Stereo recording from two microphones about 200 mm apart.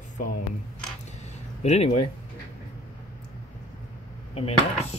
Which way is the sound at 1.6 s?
35° left (ahead or behind).